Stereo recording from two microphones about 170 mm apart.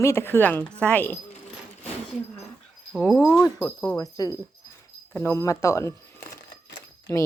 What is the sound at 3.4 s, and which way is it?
Speech, 15° left (ahead or behind).